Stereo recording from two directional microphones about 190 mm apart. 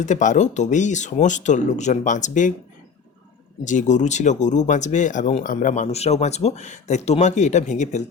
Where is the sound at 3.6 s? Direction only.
40° left (ahead or behind).